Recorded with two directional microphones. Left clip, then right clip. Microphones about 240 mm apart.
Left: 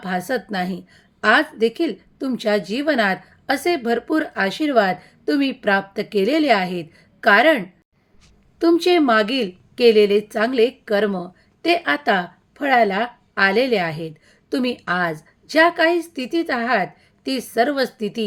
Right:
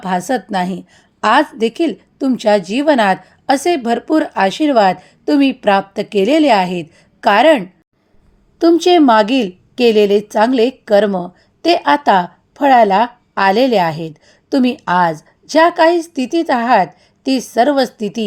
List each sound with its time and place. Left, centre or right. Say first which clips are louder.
0.0 s a woman's voice: right 6 dB; centre